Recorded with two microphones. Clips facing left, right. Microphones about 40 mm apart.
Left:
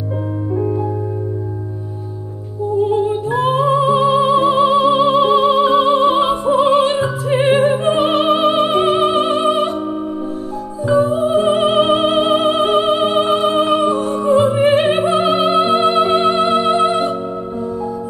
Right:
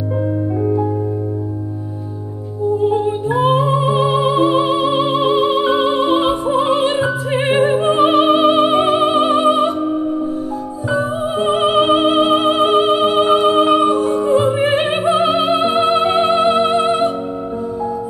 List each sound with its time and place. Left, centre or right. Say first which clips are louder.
0.6 s music: right 1 dB; centre
2.9 s music: even; right
10.9 s music: left 5 dB; right